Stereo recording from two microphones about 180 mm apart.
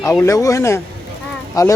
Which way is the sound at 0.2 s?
15° left (ahead or behind).